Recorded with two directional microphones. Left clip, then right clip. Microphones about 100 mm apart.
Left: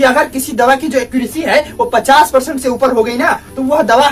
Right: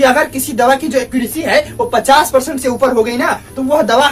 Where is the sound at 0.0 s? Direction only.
10° left (ahead or behind).